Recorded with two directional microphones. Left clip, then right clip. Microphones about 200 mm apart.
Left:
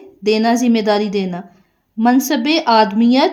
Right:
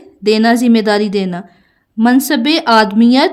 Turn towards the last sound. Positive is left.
turn(degrees=-25)  # may be behind; listen again after turning